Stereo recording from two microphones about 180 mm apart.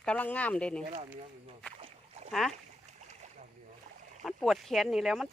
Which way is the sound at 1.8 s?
35° right (ahead or behind).